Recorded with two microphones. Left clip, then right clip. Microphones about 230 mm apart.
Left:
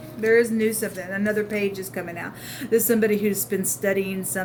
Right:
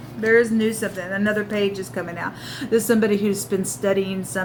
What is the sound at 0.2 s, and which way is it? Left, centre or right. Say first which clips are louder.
A woman's voice: right 2 dB; left.